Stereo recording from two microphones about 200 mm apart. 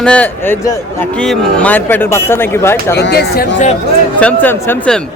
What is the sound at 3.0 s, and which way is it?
Speech, 55° left (ahead or behind).